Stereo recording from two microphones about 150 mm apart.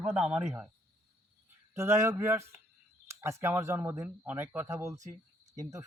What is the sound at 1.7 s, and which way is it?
Speech, 15° right (ahead or behind).